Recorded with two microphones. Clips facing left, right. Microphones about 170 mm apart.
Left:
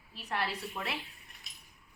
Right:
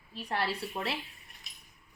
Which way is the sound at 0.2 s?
30° right (ahead or behind).